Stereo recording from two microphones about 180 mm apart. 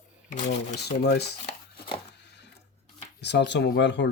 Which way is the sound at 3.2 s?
70° left (ahead or behind).